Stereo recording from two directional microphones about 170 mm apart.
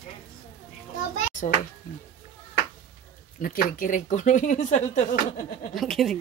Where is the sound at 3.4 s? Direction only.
55° left (ahead or behind).